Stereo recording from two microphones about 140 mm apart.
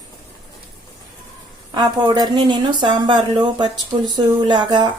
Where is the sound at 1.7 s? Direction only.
30° right (ahead or behind).